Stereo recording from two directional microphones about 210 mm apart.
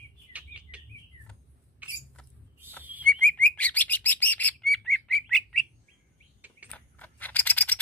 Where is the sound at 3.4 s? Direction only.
5° left (ahead or behind).